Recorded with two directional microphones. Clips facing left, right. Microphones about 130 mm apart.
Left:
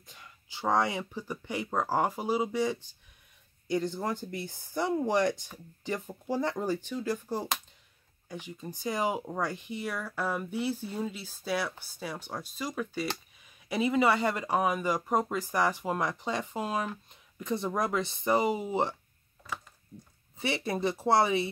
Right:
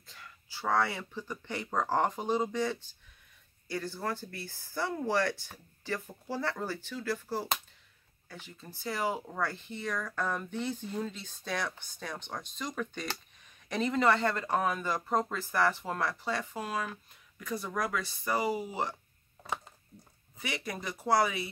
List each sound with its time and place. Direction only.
0.0 s speech: 20° left (ahead or behind)
20.3 s speech: 30° left (ahead or behind)